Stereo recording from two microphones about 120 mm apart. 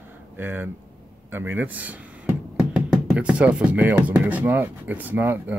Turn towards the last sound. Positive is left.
turn(degrees=-15)  # may be behind; listen again after turning